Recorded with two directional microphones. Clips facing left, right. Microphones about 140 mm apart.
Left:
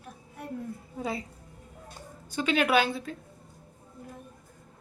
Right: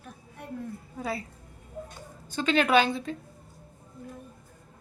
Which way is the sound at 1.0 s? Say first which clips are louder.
Even; 20° left (ahead or behind).